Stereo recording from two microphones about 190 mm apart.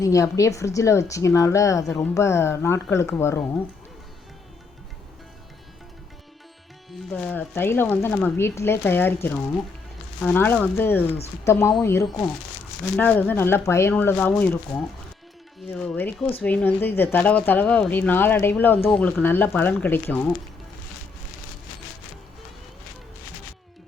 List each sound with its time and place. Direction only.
0.0 s speech: 15° left (ahead or behind)
7.1 s speech: 5° left (ahead or behind)